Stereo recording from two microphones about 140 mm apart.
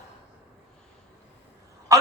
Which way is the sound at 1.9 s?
25° right (ahead or behind).